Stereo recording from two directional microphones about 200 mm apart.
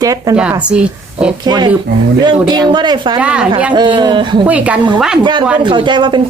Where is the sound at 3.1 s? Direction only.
5° right (ahead or behind).